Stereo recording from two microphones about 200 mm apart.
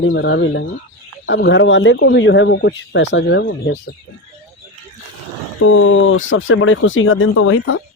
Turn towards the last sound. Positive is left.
turn(degrees=90)